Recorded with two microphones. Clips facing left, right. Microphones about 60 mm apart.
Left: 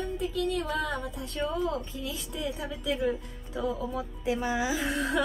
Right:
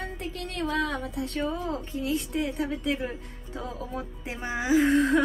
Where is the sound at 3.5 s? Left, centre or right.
Right.